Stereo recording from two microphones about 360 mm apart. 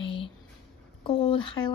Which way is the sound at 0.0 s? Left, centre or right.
Centre.